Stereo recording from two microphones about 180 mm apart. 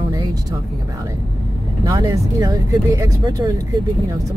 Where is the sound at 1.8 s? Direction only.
20° right (ahead or behind).